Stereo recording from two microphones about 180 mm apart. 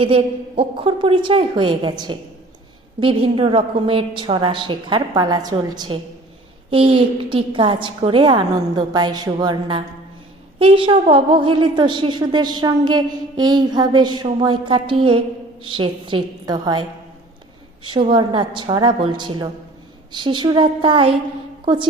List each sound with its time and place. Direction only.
0.0 s a woman's voice: 30° right (ahead or behind)
17.8 s a woman's voice: 30° right (ahead or behind)